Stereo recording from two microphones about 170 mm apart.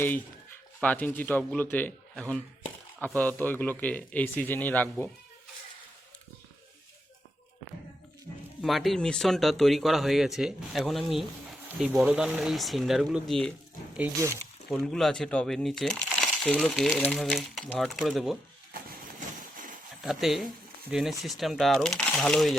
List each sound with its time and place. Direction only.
0.8 s a man's voice: 10° left (ahead or behind)
8.6 s speech: centre (ahead or behind)
14.7 s speech: centre (ahead or behind)
19.4 s a sound: 50° right (ahead or behind)
20.0 s speech: centre (ahead or behind)